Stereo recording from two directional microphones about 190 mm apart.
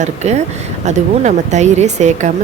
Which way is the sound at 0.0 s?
35° right (ahead or behind).